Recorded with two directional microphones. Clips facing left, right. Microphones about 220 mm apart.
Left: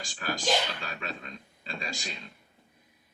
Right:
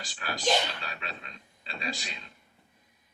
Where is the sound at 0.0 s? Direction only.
45° left (ahead or behind).